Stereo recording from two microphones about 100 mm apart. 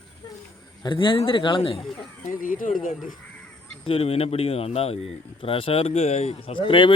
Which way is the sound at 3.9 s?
75° left (ahead or behind).